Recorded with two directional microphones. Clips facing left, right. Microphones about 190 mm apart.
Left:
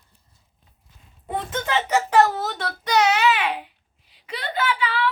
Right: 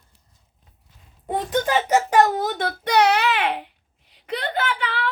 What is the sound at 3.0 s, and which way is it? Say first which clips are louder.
Babbling: right 1 dB; 60° right (ahead or behind).